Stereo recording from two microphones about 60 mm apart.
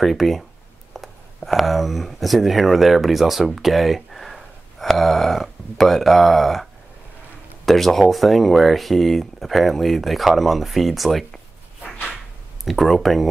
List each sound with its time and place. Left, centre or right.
0.0 s speech: centre
11.8 s a sound: centre
12.6 s speech: centre